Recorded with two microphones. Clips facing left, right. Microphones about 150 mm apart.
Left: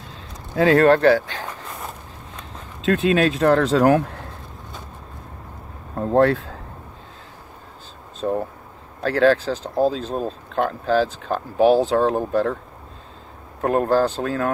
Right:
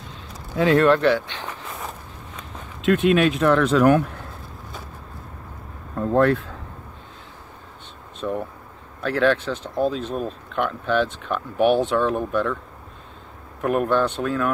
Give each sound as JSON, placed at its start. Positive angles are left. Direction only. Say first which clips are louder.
{"t": 0.1, "sound": "a sound", "louder": "left 2 dB", "side_deg": 35}
{"t": 3.2, "sound": "speech", "louder": "left 1 dB", "side_deg": 35}
{"t": 5.9, "sound": "speech", "louder": "left 1 dB", "side_deg": 30}
{"t": 8.2, "sound": "speech", "louder": "left 3 dB", "side_deg": 50}
{"t": 9.0, "sound": "speech", "louder": "left 3 dB", "side_deg": 35}
{"t": 13.6, "sound": "speech", "louder": "left 2 dB", "side_deg": 35}